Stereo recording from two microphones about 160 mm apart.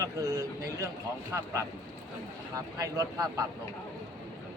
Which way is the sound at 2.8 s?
20° right (ahead or behind).